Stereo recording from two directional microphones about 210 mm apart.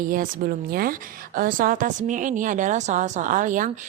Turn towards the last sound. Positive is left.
turn(degrees=-40)  # may be behind; listen again after turning